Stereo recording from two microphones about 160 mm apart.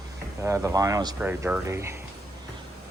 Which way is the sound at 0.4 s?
20° right (ahead or behind).